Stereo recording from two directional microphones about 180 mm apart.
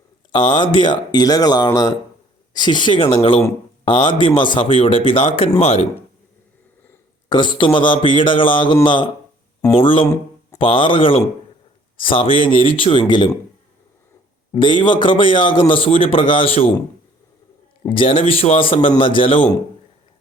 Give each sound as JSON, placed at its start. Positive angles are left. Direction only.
{"t": 0.3, "sound": "a man's voice", "side_deg": 25}
{"t": 7.3, "sound": "a man's voice", "side_deg": 25}
{"t": 14.5, "sound": "a man's voice", "side_deg": 25}
{"t": 17.8, "sound": "a man's voice", "side_deg": 30}